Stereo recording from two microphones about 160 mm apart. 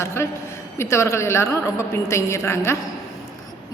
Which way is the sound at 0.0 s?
15° left (ahead or behind).